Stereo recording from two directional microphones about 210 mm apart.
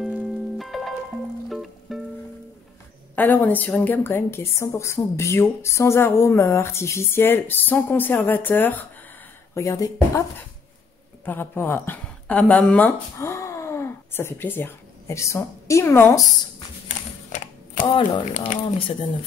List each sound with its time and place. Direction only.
0.0 s music: centre (ahead or behind)
3.2 s a woman's voice: 10° left (ahead or behind)
11.2 s speech: 10° left (ahead or behind)
16.8 s typewriter: 35° left (ahead or behind)
17.8 s speech: 25° left (ahead or behind)
18.3 s speech: 35° left (ahead or behind)